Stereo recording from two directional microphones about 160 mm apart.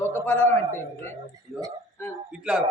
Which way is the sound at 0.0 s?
15° left (ahead or behind).